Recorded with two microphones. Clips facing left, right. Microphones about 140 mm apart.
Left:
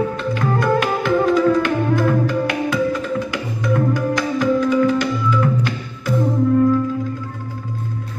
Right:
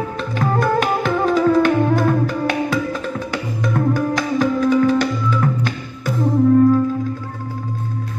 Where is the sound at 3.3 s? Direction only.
35° right (ahead or behind).